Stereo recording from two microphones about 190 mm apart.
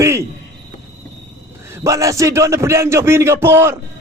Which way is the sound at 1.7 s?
15° right (ahead or behind).